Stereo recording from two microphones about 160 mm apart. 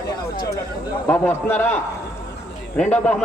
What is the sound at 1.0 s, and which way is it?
Speech, 10° left (ahead or behind).